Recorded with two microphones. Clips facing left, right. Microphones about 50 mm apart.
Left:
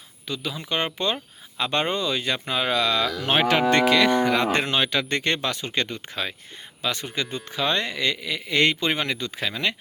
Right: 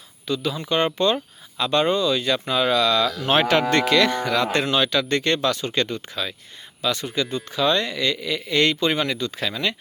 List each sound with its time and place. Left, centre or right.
0.3 s cattle: centre
0.7 s speech: centre
1.6 s speech: left
2.4 s cattle: centre
4.2 s speech: left
6.2 s speech: left
9.5 s cattle: centre